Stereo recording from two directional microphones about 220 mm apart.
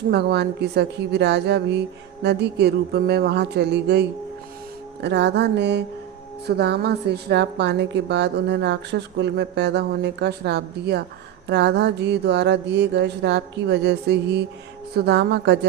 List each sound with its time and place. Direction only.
0.1 s a woman's voice: 50° right (ahead or behind)
5.0 s a woman's voice: 50° right (ahead or behind)